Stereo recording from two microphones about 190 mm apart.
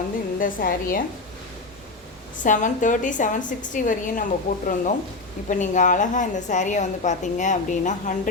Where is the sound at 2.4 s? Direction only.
40° left (ahead or behind).